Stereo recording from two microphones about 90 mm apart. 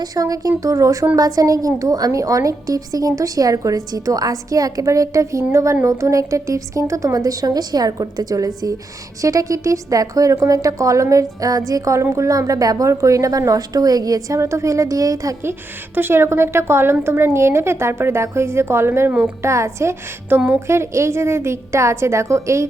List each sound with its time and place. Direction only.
0.0 s a woman's voice: 45° right (ahead or behind)
16.0 s a woman's voice: 25° right (ahead or behind)
19.4 s a woman's voice: 30° right (ahead or behind)